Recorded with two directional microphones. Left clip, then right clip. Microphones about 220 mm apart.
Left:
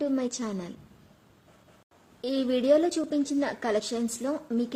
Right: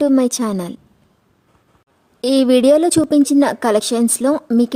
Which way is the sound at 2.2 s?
55° right (ahead or behind).